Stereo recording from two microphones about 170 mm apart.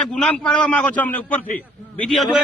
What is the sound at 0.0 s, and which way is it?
A man's voice, 5° left (ahead or behind).